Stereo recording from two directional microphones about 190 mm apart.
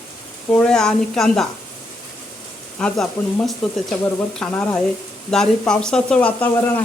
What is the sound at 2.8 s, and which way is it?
Speech, 5° left (ahead or behind).